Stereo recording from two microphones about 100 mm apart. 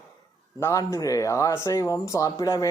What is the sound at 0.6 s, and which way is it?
Speech, 30° left (ahead or behind).